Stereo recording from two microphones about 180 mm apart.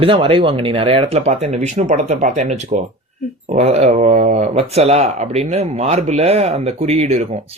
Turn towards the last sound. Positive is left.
turn(degrees=-35)  # may be behind; listen again after turning